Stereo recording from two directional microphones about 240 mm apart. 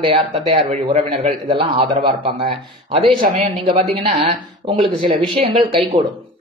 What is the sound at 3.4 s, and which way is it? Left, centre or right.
A woman's voice, right.